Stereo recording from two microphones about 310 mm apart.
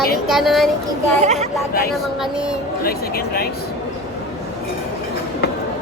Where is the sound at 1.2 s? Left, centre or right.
Right.